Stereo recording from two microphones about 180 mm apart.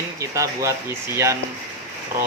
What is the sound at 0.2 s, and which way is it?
Speech, 15° right (ahead or behind).